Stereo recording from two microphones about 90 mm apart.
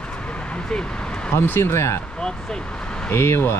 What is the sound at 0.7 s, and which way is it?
Vehicle, 10° left (ahead or behind).